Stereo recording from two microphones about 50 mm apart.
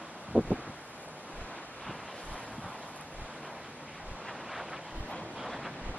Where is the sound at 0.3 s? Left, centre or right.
Right.